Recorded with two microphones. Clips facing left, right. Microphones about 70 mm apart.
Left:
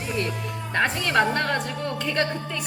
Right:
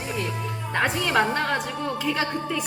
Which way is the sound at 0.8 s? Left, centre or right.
Centre.